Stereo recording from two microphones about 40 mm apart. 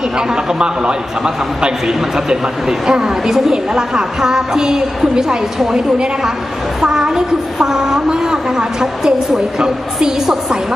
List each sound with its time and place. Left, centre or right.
0.2 s a man's voice: centre
6.8 s a woman's voice: centre